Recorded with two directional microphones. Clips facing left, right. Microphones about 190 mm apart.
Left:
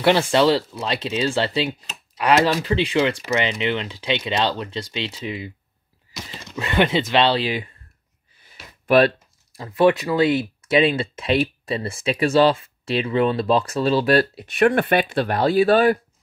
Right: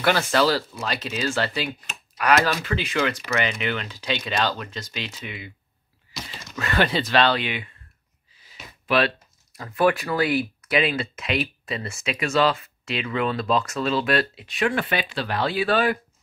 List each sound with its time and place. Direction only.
0.0 s speech: 25° left (ahead or behind)
8.4 s a sound: 50° left (ahead or behind)
9.6 s speech: 25° left (ahead or behind)
14.6 s speech: 55° left (ahead or behind)